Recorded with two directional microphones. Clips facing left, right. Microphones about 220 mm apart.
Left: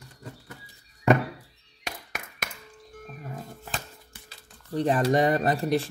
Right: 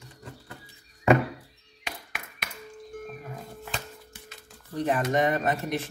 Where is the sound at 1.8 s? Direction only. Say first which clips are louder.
Left 2 dB; 45° left (ahead or behind).